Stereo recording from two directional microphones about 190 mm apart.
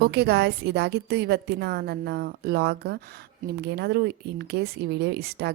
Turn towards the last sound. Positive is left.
turn(degrees=-60)  # may be behind; listen again after turning